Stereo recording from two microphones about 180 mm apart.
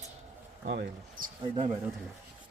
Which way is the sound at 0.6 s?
55° right (ahead or behind).